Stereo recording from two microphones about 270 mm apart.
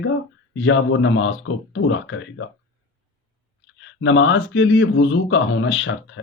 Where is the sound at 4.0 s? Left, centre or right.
Left.